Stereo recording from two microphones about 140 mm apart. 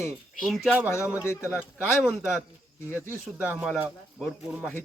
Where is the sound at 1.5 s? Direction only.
5° right (ahead or behind).